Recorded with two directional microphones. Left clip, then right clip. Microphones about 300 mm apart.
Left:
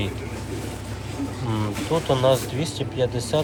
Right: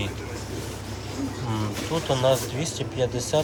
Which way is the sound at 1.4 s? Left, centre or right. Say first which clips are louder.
Left 5 dB; centre.